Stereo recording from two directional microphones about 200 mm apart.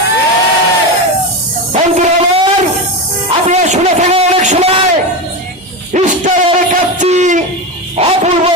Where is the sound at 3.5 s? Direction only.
35° right (ahead or behind).